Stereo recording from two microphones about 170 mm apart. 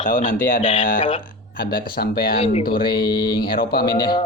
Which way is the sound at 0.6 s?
30° left (ahead or behind).